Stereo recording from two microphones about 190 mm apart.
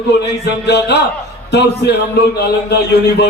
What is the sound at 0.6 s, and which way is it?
A man's voice, 65° left (ahead or behind).